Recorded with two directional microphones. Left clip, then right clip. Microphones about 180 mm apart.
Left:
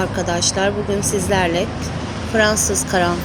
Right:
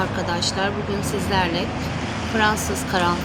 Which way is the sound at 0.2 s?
15° left (ahead or behind).